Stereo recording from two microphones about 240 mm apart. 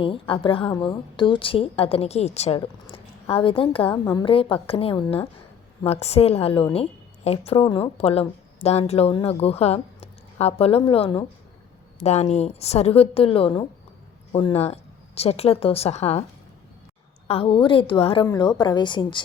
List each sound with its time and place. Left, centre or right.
0.0 s speech: left
3.8 s speech: centre
17.2 s speech: left